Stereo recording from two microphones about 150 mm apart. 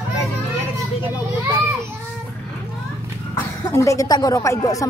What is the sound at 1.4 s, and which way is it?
Children playing, 15° right (ahead or behind).